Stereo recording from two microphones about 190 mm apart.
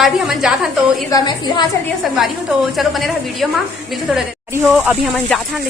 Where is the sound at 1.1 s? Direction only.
20° left (ahead or behind).